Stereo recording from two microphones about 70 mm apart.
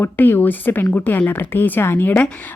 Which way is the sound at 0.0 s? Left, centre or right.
Left.